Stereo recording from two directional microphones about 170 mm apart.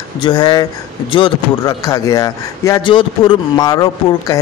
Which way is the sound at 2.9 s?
30° left (ahead or behind).